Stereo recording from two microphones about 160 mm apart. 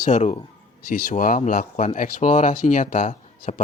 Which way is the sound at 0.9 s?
60° left (ahead or behind).